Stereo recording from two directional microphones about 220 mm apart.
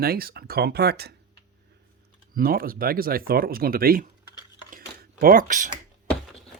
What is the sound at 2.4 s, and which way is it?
Speech, 40° right (ahead or behind).